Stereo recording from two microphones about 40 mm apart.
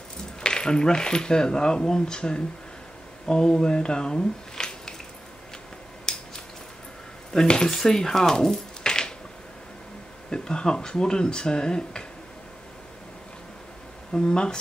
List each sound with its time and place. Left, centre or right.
0.4 s speech: left
6.1 s a sound: centre
7.3 s speech: centre
10.3 s speech: left
14.1 s speech: centre